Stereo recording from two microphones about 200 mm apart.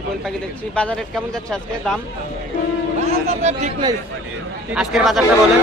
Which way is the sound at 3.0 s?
35° right (ahead or behind).